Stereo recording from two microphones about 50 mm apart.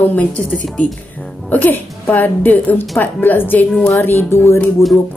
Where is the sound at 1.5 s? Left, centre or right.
Left.